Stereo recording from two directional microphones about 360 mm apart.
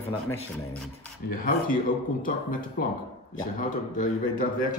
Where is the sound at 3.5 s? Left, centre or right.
Left.